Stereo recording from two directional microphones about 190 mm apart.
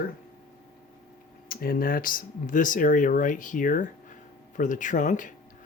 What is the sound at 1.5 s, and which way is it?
Speech, 50° left (ahead or behind).